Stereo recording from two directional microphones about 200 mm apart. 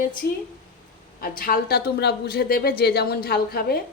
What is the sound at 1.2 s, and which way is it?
A woman's voice, 45° left (ahead or behind).